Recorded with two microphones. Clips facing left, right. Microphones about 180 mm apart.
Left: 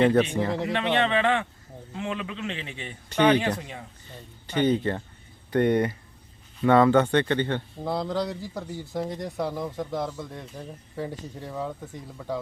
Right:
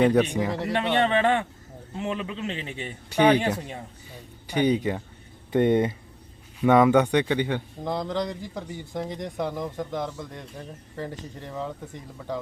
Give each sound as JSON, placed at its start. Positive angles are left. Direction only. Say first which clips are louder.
{"t": 0.0, "sound": "speech", "louder": "even", "side_deg": -10}
{"t": 0.7, "sound": "a man's voice", "louder": "right 3 dB", "side_deg": -40}
{"t": 3.1, "sound": "speech", "louder": "right 1 dB", "side_deg": -10}
{"t": 7.8, "sound": "speech", "louder": "left 1 dB", "side_deg": 5}